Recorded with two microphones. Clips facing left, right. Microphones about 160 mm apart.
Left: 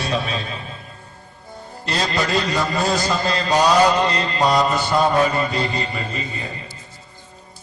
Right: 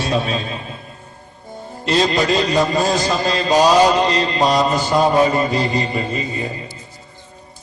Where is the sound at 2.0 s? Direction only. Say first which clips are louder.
Right 4 dB; 20° right (ahead or behind).